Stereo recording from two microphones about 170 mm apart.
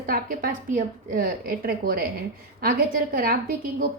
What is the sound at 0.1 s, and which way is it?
A woman's voice, 55° right (ahead or behind).